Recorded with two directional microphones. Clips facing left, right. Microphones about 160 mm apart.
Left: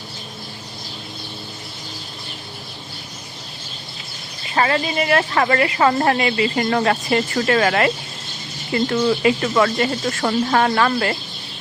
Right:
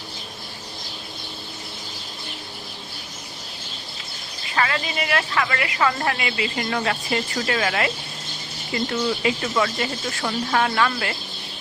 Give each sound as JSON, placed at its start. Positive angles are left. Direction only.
{"t": 4.5, "sound": "a woman's voice", "side_deg": 35}